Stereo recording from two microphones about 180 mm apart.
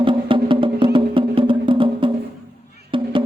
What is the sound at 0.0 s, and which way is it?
Music, 30° right (ahead or behind).